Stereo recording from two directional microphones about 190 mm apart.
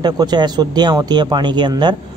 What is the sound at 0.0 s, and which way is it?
Speech, 20° right (ahead or behind).